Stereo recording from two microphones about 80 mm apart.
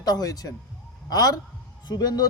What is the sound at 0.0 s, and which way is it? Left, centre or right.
A man's voice, left.